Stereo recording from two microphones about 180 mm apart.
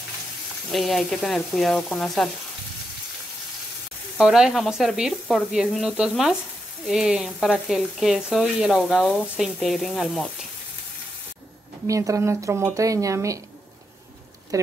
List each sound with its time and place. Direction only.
0.7 s speech: centre (ahead or behind)
4.2 s speech: 5° right (ahead or behind)
11.9 s speech: 15° right (ahead or behind)
14.5 s speech: 20° right (ahead or behind)